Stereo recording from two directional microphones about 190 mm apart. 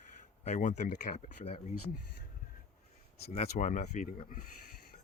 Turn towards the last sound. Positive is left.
turn(degrees=40)  # may be behind; listen again after turning